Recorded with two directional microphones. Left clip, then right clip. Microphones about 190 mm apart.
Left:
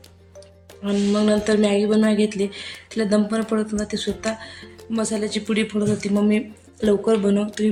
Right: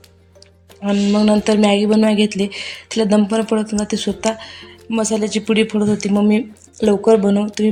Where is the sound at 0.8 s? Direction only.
30° right (ahead or behind).